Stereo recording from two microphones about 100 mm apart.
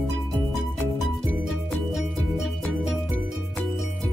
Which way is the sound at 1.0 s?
Centre (ahead or behind).